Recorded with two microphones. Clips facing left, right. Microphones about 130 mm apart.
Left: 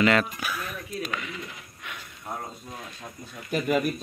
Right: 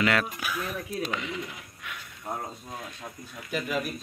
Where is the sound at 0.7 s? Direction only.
25° right (ahead or behind).